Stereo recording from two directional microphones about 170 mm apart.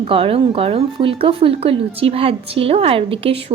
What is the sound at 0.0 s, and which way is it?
A woman's voice, 35° right (ahead or behind).